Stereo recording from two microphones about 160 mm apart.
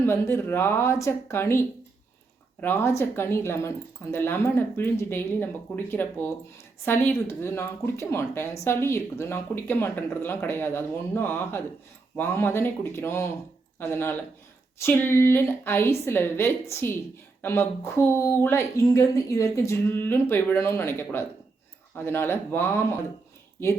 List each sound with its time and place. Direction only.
0.0 s speech: 15° left (ahead or behind)